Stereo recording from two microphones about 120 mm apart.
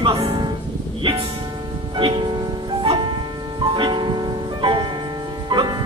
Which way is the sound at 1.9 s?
40° right (ahead or behind).